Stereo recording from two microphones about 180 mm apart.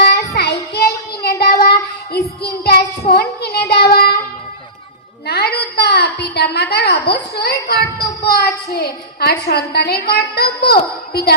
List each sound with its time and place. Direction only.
0.0 s child singing: 60° left (ahead or behind)
5.2 s a sound: 60° left (ahead or behind)
8.2 s a woman's voice: 60° left (ahead or behind)